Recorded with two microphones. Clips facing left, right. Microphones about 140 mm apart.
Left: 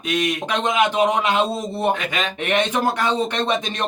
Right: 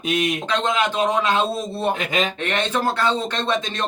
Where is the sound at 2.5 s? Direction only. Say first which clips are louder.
Left 5 dB; 15° left (ahead or behind).